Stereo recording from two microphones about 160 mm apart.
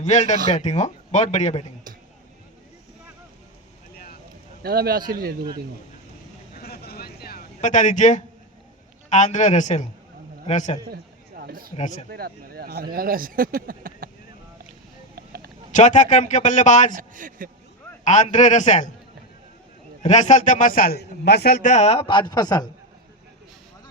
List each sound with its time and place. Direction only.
0.0 s a man's voice: 45° left (ahead or behind)
3.9 s vehicle: 65° left (ahead or behind)
4.6 s a man's voice: 70° right (ahead or behind)
6.6 s vehicle: 75° left (ahead or behind)
7.6 s a man's voice: 50° left (ahead or behind)
10.9 s a sound: 70° right (ahead or behind)
11.8 s a man's voice: 45° left (ahead or behind)
12.0 s speech: 75° right (ahead or behind)
15.1 s a sound: 75° right (ahead or behind)
15.7 s a man's voice: 50° left (ahead or behind)
16.9 s speech: 60° right (ahead or behind)
18.0 s a man's voice: 50° left (ahead or behind)
20.0 s a man's voice: 45° left (ahead or behind); by 22.7 s 25° left (ahead or behind)